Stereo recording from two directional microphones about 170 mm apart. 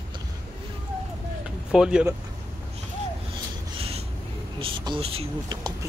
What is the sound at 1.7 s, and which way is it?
Speech, 5° right (ahead or behind).